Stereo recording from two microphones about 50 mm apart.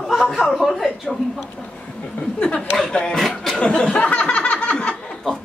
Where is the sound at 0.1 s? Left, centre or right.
Centre.